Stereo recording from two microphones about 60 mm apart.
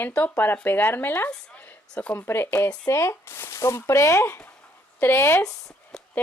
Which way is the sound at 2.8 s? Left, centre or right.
Left.